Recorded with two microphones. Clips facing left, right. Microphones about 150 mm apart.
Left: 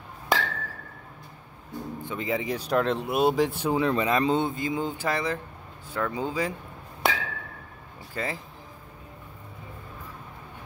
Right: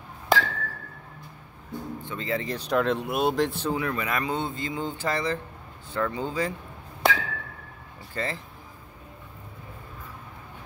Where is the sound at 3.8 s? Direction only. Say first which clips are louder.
Left 5 dB; 25° left (ahead or behind); by 6.5 s 10° left (ahead or behind).